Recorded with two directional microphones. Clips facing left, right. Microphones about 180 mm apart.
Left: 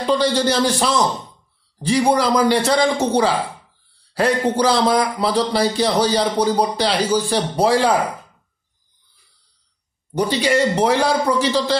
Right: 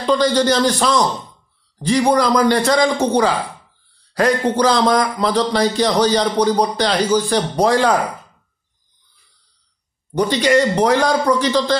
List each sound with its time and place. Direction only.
0.0 s speech: 10° left (ahead or behind)
10.1 s speech: 5° left (ahead or behind)